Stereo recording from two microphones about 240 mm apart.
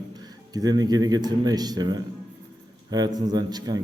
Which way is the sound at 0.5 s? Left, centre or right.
Centre.